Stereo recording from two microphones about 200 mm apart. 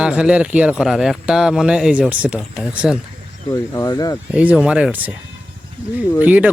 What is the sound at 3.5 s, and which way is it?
Speech, 15° left (ahead or behind).